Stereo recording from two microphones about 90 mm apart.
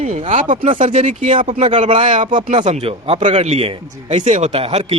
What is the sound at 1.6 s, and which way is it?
Speech, 80° right.